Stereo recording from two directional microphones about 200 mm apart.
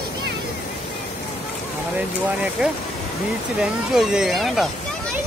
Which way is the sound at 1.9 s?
5° right (ahead or behind).